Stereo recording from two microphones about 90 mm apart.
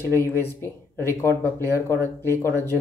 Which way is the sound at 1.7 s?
35° right (ahead or behind).